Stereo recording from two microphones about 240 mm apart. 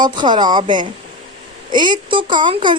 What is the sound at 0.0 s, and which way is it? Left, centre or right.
Speech, centre.